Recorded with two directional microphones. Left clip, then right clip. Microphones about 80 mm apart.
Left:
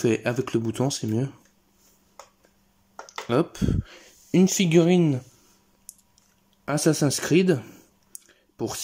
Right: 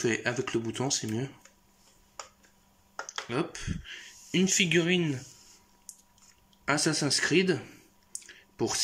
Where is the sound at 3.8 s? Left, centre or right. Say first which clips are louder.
Right 4 dB; left.